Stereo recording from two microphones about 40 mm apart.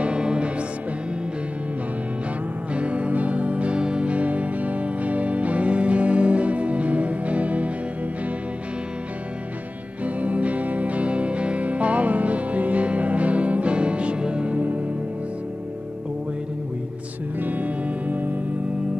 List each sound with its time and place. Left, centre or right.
0.0 s music: right
2.7 s music: right
10.0 s music: right
17.4 s music: right